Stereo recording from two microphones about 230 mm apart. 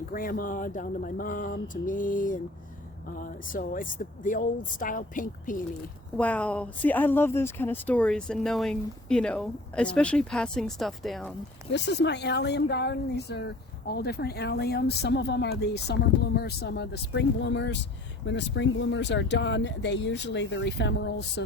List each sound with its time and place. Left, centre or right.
0.1 s speech: left
6.1 s speech: centre
11.7 s speech: left